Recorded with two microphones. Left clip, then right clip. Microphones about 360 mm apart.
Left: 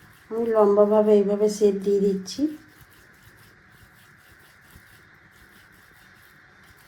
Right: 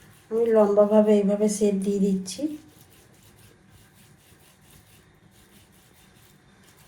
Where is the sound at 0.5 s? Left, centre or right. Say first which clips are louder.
Left 1 dB; left.